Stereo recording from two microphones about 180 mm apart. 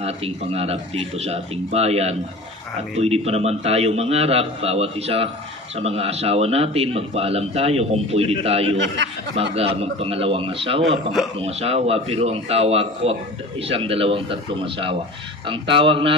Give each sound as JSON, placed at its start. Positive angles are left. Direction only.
{"t": 0.0, "sound": "speech", "side_deg": -35}
{"t": 8.7, "sound": "speech", "side_deg": -80}
{"t": 9.6, "sound": "speech", "side_deg": -35}